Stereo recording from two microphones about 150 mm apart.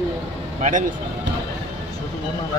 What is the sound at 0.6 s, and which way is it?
Speech, 60° right (ahead or behind).